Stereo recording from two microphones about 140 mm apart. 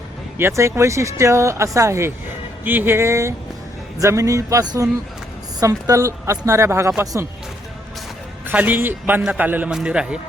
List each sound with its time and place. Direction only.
0.3 s a man's voice: 20° right (ahead or behind)
8.4 s a man's voice: 10° right (ahead or behind)